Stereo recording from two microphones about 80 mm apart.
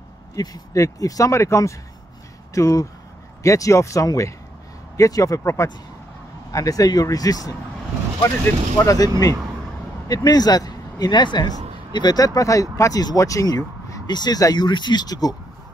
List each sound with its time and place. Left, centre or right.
0.4 s speech: left
8.7 s a man's voice: left
12.4 s speech: left
14.0 s speech: left